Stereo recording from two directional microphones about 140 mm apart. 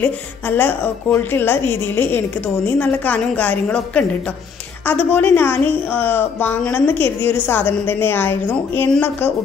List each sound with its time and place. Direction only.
0.0 s a woman's voice: 15° left (ahead or behind)